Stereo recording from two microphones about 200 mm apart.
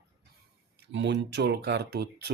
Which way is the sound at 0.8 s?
60° right (ahead or behind).